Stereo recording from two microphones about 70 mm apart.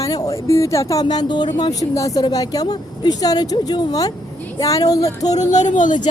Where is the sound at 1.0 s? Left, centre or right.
Left.